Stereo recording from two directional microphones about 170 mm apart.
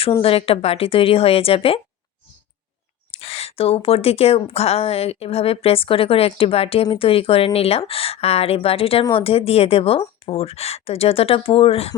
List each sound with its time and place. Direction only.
0.2 s speech: 35° left (ahead or behind)
3.1 s speech: 35° left (ahead or behind)